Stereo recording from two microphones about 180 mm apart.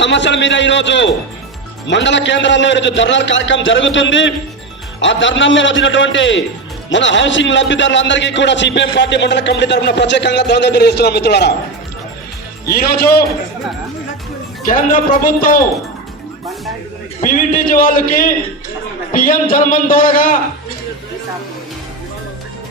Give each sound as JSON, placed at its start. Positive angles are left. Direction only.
{"t": 0.0, "sound": "a man's voice", "side_deg": 80}
{"t": 12.6, "sound": "speech", "side_deg": 60}
{"t": 14.7, "sound": "a man's voice", "side_deg": 50}
{"t": 17.2, "sound": "a man's voice", "side_deg": 45}